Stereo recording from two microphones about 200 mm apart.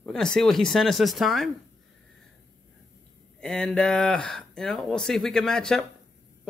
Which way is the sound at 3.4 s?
5° left (ahead or behind).